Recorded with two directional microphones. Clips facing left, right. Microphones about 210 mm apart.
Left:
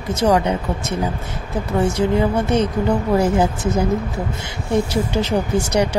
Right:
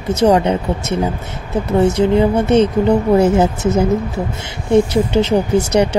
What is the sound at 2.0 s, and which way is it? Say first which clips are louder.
Speech: right 4 dB; 25° right (ahead or behind).